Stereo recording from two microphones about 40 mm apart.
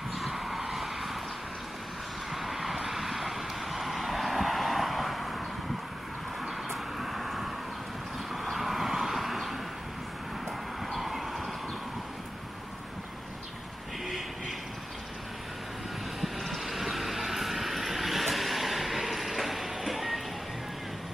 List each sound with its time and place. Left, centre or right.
0.1 s a sound: centre
2.3 s vehicle: centre
6.7 s vehicle: centre
10.9 s train: centre
16.2 s vehicle: centre